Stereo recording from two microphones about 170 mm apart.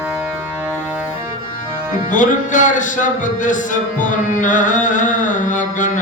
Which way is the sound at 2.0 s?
50° left (ahead or behind).